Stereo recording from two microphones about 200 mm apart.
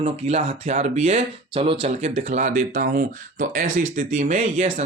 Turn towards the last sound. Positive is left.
turn(degrees=-35)  # may be behind; listen again after turning